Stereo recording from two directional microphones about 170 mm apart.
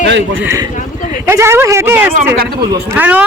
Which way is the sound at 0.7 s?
45° left (ahead or behind).